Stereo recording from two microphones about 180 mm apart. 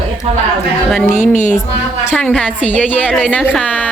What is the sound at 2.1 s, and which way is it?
A woman's voice, 5° left (ahead or behind).